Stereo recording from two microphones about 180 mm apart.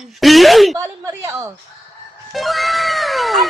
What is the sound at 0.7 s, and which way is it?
Speech, 15° right (ahead or behind).